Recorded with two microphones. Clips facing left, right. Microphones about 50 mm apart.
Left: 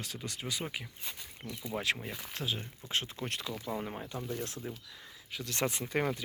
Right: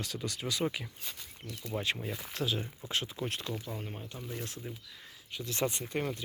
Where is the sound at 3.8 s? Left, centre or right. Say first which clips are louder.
Left 4 dB; left.